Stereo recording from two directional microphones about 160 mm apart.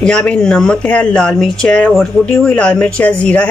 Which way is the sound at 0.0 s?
5° left (ahead or behind).